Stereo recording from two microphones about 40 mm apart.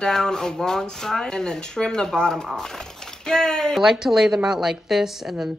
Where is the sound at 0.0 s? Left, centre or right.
Centre.